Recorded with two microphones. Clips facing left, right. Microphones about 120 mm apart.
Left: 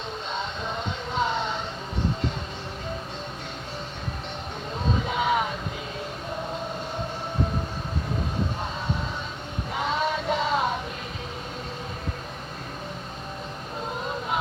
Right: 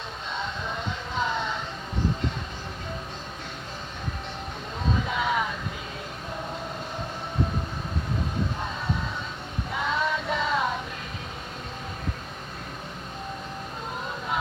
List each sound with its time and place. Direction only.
1.1 s music: 25° left (ahead or behind)
5.0 s vehicle: 25° left (ahead or behind)
9.8 s music: 25° left (ahead or behind)